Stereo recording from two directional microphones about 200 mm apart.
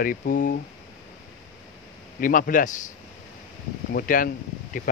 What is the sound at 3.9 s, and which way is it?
Speech, 45° left (ahead or behind).